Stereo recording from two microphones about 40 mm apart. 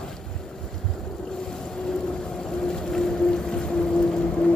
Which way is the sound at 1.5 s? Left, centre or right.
Centre.